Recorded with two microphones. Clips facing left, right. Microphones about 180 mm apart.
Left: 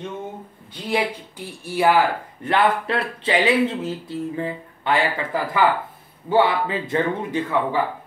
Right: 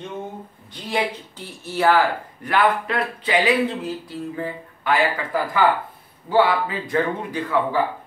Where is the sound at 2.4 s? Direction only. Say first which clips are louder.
Even; 25° left (ahead or behind).